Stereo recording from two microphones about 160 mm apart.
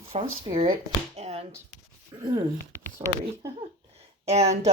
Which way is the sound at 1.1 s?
40° right (ahead or behind).